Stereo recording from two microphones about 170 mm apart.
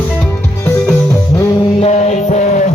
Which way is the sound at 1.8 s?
40° left (ahead or behind).